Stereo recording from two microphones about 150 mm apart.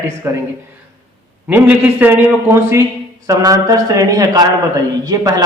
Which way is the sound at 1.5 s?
10° right (ahead or behind).